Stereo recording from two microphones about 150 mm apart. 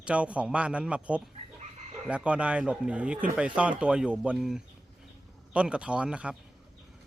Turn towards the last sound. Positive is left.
turn(degrees=-5)  # may be behind; listen again after turning